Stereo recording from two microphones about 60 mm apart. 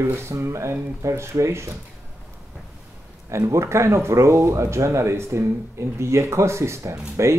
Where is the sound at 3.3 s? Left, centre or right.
Right.